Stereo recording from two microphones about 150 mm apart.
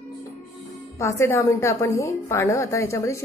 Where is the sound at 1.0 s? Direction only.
20° left (ahead or behind).